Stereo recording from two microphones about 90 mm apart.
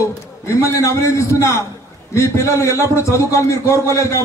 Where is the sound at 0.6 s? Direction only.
35° left (ahead or behind).